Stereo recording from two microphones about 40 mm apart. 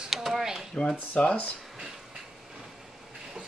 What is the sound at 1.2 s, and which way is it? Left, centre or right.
Speech, left.